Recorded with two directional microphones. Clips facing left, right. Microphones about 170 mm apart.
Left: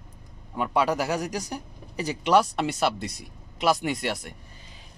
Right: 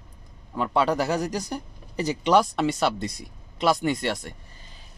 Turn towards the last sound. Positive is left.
turn(degrees=5)  # may be behind; listen again after turning